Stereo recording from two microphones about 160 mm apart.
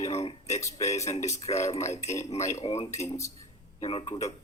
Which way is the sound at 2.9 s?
20° left (ahead or behind).